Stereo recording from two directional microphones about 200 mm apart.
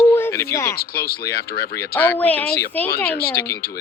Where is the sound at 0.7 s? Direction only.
50° left (ahead or behind).